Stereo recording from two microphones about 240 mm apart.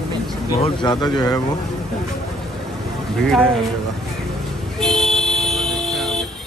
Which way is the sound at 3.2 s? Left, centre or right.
Centre.